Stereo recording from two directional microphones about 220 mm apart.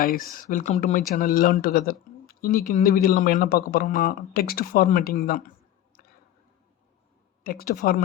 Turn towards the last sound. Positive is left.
turn(degrees=45)  # may be behind; listen again after turning